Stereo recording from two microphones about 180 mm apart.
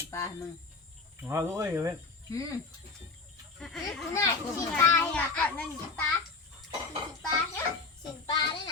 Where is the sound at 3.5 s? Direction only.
Centre (ahead or behind).